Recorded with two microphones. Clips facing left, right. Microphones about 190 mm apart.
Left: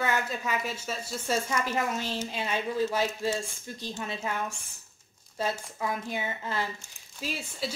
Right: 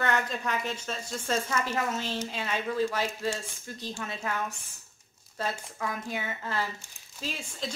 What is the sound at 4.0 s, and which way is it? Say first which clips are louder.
Speech: left 1 dB; 20° left (ahead or behind).